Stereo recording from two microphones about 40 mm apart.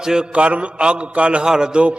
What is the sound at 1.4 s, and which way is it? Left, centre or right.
Speech, centre.